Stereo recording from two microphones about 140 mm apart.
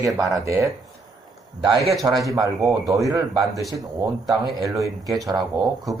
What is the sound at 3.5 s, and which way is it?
Speech, centre (ahead or behind).